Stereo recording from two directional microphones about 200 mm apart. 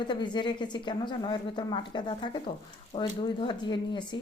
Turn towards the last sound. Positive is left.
turn(degrees=25)  # may be behind; listen again after turning